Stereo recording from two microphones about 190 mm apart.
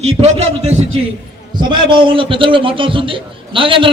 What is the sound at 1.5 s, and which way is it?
A man's voice, 25° right (ahead or behind).